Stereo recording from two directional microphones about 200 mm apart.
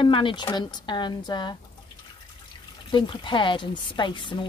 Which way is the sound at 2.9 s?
25° left (ahead or behind).